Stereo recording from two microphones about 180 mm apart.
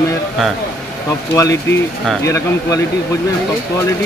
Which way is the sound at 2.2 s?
15° left (ahead or behind).